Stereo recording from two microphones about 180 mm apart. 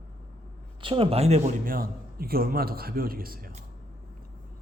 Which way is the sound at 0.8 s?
30° right (ahead or behind).